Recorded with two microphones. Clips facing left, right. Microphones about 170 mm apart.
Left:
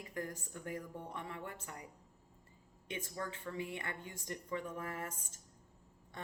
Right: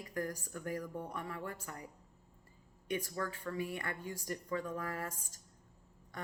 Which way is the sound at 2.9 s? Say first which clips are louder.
Right 5 dB; 20° left (ahead or behind).